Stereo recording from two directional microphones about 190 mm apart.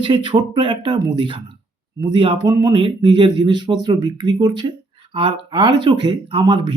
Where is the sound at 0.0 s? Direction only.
25° right (ahead or behind).